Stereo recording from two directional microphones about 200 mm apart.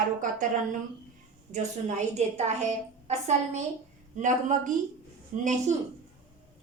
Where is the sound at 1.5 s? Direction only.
35° right (ahead or behind).